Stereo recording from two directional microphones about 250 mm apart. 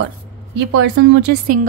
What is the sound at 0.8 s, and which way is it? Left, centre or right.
Speech, right.